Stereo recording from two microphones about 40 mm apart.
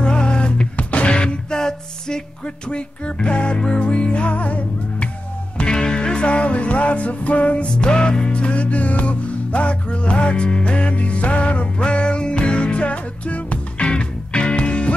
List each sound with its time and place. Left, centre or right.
0.0 s music: left
5.6 s music: centre; by 7.6 s left
7.6 s music: left
13.8 s music: left